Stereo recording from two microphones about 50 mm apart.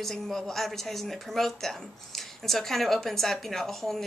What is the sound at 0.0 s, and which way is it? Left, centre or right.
Speech, centre.